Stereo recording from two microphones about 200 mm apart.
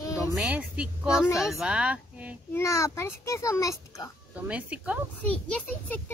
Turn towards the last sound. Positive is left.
turn(degrees=5)  # may be behind; listen again after turning